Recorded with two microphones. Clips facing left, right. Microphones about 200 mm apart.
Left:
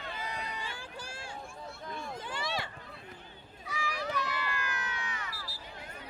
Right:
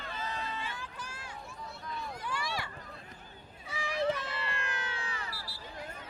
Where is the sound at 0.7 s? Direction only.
30° left (ahead or behind).